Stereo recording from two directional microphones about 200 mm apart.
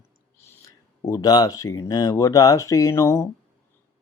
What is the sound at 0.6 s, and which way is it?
Speech, 15° left (ahead or behind).